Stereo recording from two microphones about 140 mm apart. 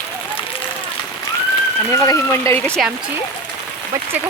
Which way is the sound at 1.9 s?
20° left (ahead or behind).